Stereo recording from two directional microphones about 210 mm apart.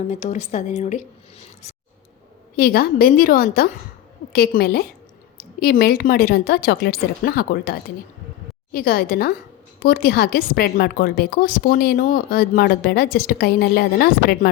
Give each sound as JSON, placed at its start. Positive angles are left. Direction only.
{"t": 0.1, "sound": "a woman's voice", "side_deg": 35}
{"t": 2.6, "sound": "a woman's voice", "side_deg": 45}